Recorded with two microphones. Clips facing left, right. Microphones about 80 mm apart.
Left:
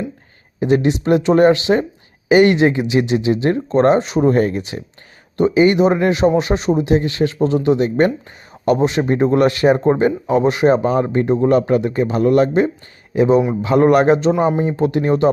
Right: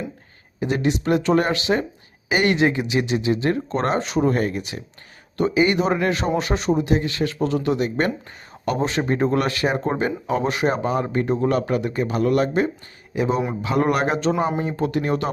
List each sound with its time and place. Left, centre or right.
0.6 s speech: left
14.3 s speech: centre
14.8 s speech: left